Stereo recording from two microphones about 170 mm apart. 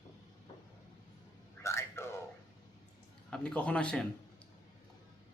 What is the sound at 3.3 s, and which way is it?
Speech, 5° left (ahead or behind).